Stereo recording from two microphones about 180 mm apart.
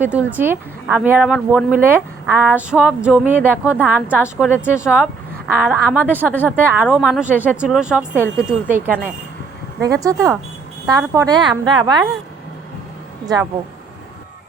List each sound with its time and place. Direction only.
0.0 s a woman's voice: 10° right (ahead or behind)
4.4 s speech: 10° left (ahead or behind)
4.8 s a woman's voice: 5° right (ahead or behind); by 12.0 s 25° right (ahead or behind)